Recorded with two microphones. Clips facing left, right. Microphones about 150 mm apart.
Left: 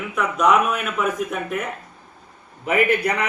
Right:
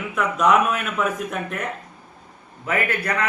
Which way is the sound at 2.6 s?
15° left (ahead or behind).